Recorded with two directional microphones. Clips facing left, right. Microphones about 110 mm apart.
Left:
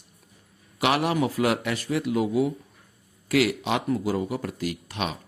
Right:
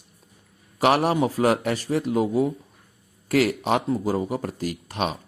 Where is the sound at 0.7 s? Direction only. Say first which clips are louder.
Right 3 dB; 40° right (ahead or behind).